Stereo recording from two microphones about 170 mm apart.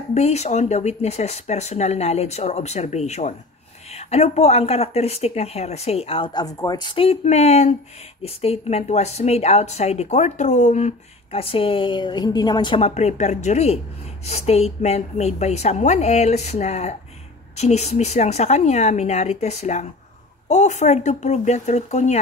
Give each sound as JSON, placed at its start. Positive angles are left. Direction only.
{"t": 0.1, "sound": "speech", "side_deg": 40}